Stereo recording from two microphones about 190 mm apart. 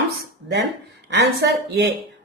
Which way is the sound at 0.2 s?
65° right (ahead or behind).